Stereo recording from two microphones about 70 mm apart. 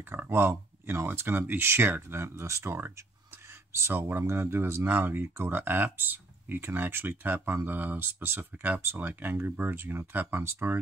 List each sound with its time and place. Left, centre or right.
0.1 s speech: right